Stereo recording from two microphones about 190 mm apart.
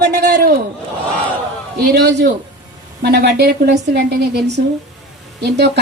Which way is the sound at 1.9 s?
60° right (ahead or behind).